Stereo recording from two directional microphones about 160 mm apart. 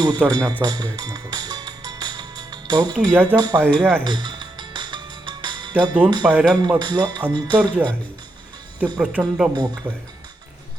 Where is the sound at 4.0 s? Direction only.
30° right (ahead or behind).